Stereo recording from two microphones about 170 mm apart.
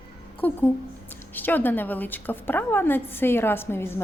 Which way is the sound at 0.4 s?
10° left (ahead or behind).